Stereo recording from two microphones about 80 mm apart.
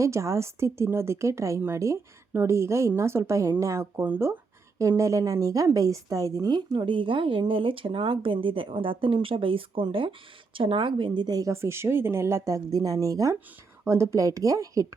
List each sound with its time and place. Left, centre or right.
0.0 s speech: right
4.0 s speech: right
4.8 s a woman's voice: right
6.7 s speech: right
11.3 s speech: right
13.8 s a woman's voice: right